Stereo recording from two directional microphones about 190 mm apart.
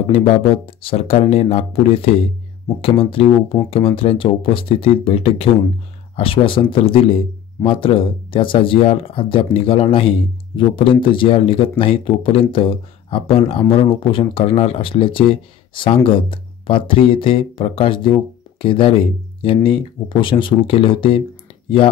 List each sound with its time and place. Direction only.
0.7 s speech: 30° left (ahead or behind)